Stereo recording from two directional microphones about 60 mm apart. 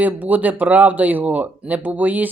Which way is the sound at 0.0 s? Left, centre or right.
Right.